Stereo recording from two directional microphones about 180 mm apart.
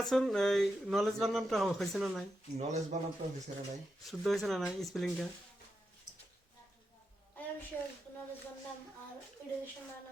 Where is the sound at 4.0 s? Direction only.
Centre (ahead or behind).